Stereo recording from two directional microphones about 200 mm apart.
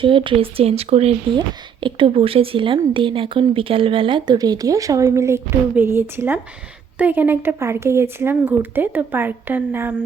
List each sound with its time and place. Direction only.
0.0 s speech: 25° right (ahead or behind); by 10.0 s 5° right (ahead or behind)